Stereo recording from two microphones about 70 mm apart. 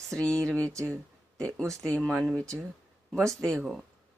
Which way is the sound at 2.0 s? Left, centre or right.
Centre.